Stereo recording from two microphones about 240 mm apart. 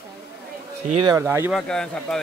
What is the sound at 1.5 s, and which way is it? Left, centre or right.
Speech, centre.